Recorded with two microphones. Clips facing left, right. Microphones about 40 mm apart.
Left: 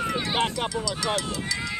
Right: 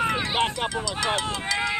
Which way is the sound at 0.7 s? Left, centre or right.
Right.